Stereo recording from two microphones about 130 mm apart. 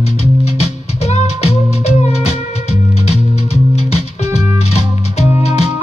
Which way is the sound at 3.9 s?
55° left (ahead or behind).